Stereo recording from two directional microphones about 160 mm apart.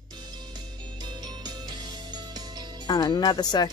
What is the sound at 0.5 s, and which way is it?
Music, 25° right (ahead or behind).